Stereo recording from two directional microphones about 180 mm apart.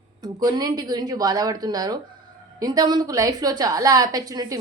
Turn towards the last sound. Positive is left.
turn(degrees=-20)  # may be behind; listen again after turning